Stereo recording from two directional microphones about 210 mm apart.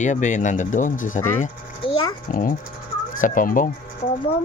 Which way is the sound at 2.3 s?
40° left (ahead or behind).